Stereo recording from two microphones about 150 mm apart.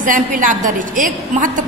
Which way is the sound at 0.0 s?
60° right (ahead or behind).